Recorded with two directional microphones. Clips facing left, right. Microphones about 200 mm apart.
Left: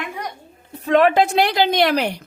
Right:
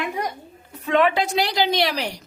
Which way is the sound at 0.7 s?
40° left (ahead or behind).